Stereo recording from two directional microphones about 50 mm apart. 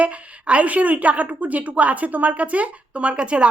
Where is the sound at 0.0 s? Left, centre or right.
Right.